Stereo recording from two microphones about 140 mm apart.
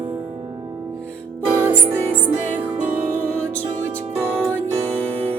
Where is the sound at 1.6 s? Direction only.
15° right (ahead or behind).